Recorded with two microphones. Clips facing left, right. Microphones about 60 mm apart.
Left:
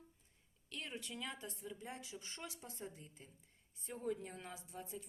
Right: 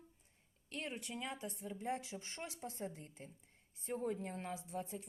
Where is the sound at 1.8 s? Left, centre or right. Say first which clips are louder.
Right 8 dB; right.